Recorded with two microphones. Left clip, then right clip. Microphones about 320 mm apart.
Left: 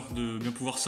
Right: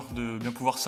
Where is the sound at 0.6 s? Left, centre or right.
Centre.